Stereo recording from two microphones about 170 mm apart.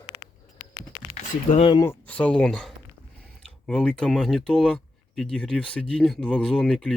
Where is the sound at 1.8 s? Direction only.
10° left (ahead or behind).